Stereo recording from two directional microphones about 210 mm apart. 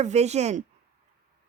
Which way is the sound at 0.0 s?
30° right (ahead or behind).